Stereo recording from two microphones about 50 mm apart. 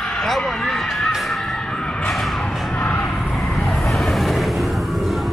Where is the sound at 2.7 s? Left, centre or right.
Left.